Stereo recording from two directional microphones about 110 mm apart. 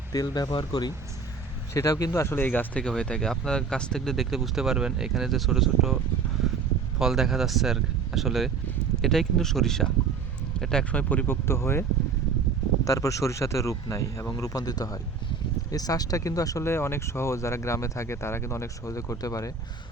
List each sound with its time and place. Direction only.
0.1 s speech: 35° left (ahead or behind)
1.7 s speech: 25° left (ahead or behind); by 6.0 s centre (ahead or behind)
7.0 s speech: 5° right (ahead or behind); by 19.5 s 30° left (ahead or behind)